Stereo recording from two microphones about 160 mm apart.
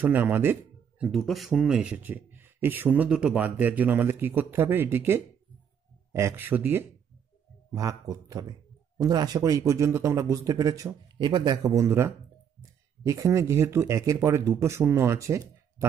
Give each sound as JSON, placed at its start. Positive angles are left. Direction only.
{"t": 0.0, "sound": "speech", "side_deg": -10}
{"t": 7.7, "sound": "a man's voice", "side_deg": -20}